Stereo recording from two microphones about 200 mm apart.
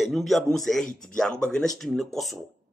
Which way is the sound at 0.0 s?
Centre (ahead or behind).